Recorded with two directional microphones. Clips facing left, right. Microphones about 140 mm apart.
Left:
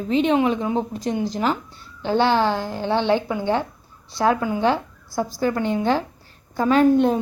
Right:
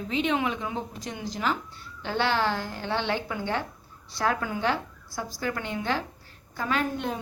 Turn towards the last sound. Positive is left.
turn(degrees=35)  # may be behind; listen again after turning